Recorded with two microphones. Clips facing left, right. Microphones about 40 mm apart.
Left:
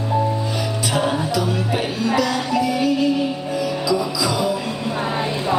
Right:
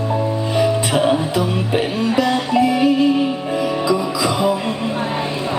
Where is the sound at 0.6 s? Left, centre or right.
Right.